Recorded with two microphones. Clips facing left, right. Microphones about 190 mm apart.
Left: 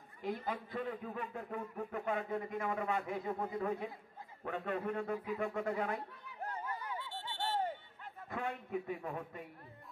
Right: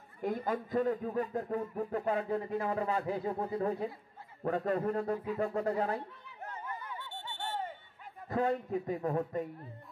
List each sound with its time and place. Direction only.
0.2 s a man's voice: 50° right (ahead or behind)
7.3 s a sound: 35° left (ahead or behind)
8.3 s a man's voice: 40° right (ahead or behind)